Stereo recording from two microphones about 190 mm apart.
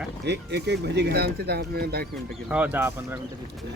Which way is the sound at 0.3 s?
65° right (ahead or behind).